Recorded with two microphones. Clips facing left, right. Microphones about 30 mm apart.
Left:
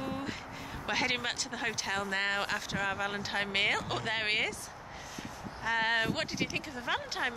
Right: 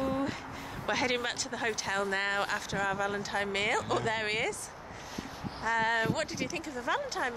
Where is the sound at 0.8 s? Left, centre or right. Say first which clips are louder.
Right 1 dB; centre.